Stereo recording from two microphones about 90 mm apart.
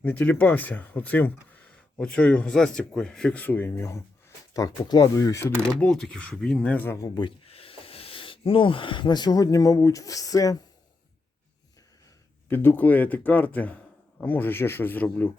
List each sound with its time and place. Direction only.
0.0 s speech: 15° left (ahead or behind)
4.5 s speech: 40° left (ahead or behind)
5.8 s speech: 5° left (ahead or behind)
7.1 s speech: 65° left (ahead or behind); by 10.6 s 40° left (ahead or behind)
12.5 s speech: 25° left (ahead or behind)